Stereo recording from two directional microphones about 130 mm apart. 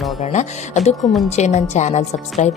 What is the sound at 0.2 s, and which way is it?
Speech, 65° left (ahead or behind).